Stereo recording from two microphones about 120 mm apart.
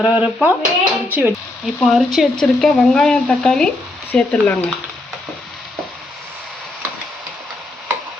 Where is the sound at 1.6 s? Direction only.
Centre (ahead or behind).